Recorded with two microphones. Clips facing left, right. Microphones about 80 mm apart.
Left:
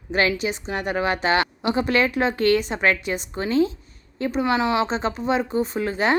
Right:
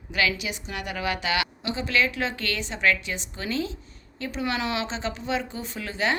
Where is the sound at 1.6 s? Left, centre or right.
Left.